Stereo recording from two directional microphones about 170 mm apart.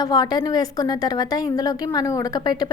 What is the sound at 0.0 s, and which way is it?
A woman's voice, 25° left (ahead or behind).